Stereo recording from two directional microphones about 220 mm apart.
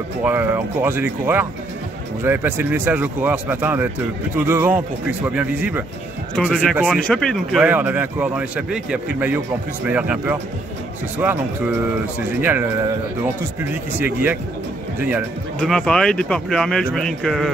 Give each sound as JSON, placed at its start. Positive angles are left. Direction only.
{"t": 0.2, "sound": "speech", "side_deg": -10}